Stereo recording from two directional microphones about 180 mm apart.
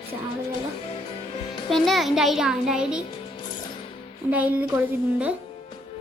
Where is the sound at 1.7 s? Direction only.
Centre (ahead or behind).